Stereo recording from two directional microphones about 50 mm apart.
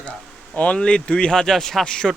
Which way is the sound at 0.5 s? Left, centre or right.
Left.